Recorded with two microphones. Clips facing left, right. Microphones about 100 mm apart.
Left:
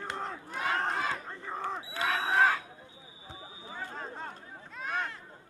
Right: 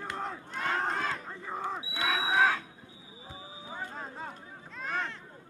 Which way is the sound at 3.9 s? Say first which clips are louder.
Even; 5° right (ahead or behind).